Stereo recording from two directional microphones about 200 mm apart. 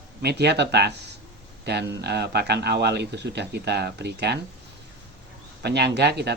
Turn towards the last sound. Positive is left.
turn(degrees=-55)  # may be behind; listen again after turning